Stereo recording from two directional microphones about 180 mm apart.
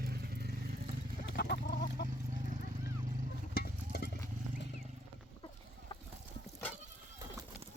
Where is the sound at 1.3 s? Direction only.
65° left (ahead or behind).